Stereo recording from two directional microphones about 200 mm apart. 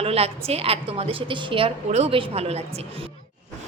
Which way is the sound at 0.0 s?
30° right (ahead or behind).